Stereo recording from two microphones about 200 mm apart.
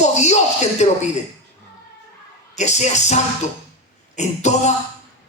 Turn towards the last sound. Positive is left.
turn(degrees=35)  # may be behind; listen again after turning